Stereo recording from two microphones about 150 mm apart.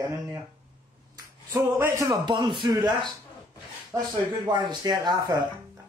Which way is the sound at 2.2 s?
30° right (ahead or behind).